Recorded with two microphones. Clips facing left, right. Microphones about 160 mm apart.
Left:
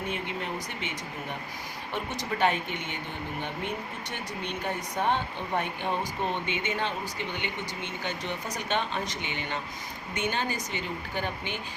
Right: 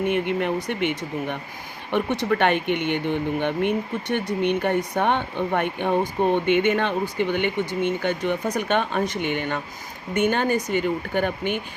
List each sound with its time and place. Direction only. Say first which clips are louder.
0.1 s speech: right 11 dB; 65° right (ahead or behind)